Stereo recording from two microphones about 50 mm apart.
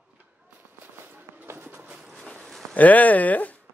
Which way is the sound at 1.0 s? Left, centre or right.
Right.